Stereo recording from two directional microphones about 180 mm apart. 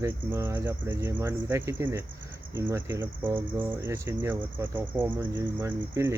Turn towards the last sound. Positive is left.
turn(degrees=-15)  # may be behind; listen again after turning